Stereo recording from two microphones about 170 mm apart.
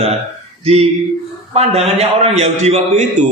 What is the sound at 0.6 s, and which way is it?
A woman's voice, 35° right (ahead or behind).